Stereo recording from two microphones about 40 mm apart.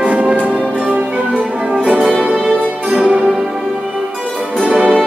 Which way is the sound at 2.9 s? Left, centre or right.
Right.